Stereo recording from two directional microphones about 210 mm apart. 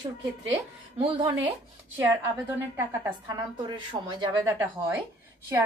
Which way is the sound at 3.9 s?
20° right (ahead or behind).